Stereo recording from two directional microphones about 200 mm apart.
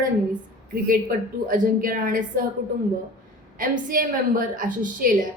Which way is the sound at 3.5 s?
45° right (ahead or behind).